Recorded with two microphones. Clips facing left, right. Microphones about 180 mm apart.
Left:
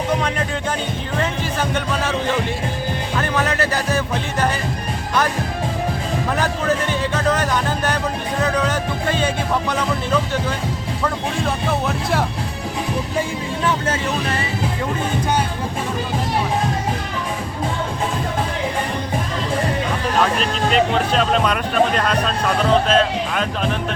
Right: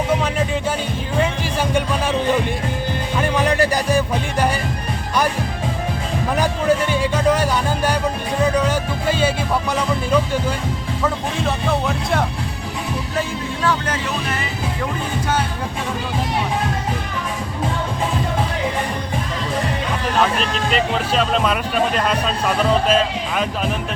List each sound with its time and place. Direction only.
3.2 s music: 10° right (ahead or behind)
6.3 s music: 10° right (ahead or behind)
13.7 s vehicle: 25° left (ahead or behind)
20.7 s speech: centre (ahead or behind)